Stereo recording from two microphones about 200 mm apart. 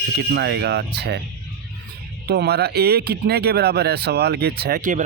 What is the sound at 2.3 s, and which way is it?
Speech, 55° right (ahead or behind).